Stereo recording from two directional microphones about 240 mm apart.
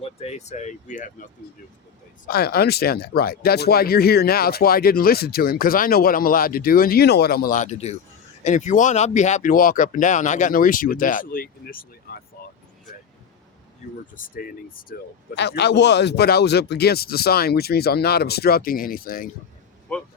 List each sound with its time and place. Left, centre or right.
0.0 s speech: left
13.8 s speech: left
19.9 s speech: centre